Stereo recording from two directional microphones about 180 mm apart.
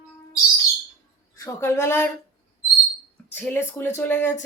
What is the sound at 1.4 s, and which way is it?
Speech, 15° left (ahead or behind).